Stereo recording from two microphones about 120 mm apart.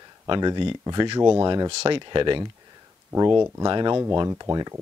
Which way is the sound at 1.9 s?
40° right (ahead or behind).